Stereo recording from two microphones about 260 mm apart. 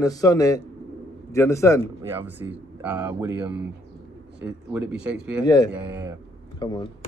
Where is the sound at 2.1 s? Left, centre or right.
Centre.